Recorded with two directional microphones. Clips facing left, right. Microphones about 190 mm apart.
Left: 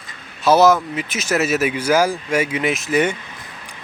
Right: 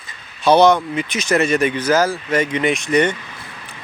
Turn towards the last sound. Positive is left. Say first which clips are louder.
# right 2 dB
turn(degrees=5)  # may be behind; listen again after turning